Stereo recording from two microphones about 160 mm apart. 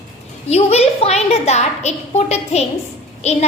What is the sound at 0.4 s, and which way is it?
A woman's voice, 40° left (ahead or behind).